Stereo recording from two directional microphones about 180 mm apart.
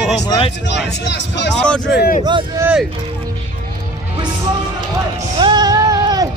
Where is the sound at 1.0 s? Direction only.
75° left (ahead or behind).